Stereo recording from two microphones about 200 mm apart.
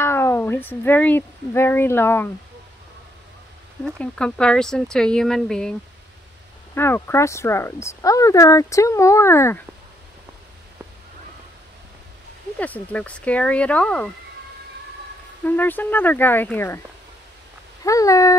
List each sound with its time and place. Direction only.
0.0 s speech: 10° left (ahead or behind)
3.8 s speech: 5° left (ahead or behind)
12.5 s speech: 5° left (ahead or behind)
15.4 s speech: 10° left (ahead or behind)
17.8 s speech: 15° left (ahead or behind)